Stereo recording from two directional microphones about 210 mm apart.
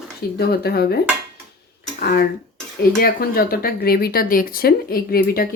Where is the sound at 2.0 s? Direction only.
45° left (ahead or behind).